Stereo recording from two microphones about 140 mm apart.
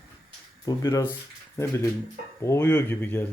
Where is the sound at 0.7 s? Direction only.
25° left (ahead or behind).